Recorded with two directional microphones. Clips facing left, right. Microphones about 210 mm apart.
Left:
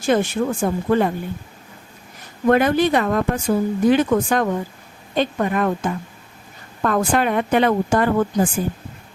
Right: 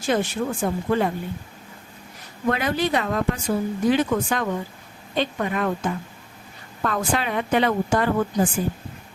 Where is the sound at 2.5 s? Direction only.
50° left (ahead or behind).